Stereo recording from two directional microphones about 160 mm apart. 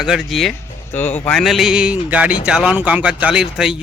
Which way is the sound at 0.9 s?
10° left (ahead or behind).